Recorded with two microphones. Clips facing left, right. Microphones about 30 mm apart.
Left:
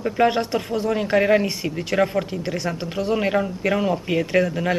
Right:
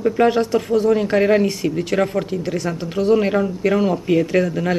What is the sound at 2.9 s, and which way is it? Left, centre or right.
Speech, centre.